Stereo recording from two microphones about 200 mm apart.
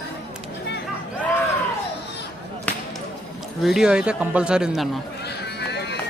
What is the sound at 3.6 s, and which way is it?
A man's voice, centre (ahead or behind).